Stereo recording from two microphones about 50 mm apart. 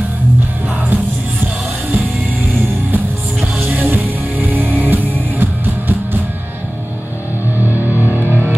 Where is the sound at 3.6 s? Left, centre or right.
Right.